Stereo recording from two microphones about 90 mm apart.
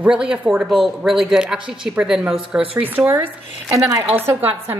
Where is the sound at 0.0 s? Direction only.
10° right (ahead or behind).